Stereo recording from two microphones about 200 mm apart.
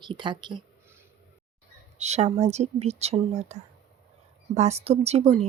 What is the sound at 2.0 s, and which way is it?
Speech, 35° right (ahead or behind).